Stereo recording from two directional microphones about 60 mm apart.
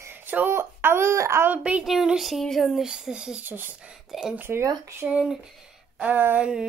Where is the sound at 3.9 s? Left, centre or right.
Centre.